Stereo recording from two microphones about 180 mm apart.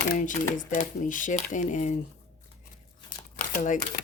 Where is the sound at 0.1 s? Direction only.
45° left (ahead or behind).